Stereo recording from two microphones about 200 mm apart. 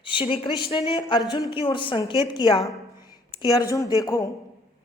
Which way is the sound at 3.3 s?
20° left (ahead or behind).